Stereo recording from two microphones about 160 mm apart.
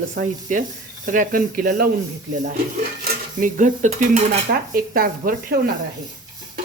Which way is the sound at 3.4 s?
50° right (ahead or behind).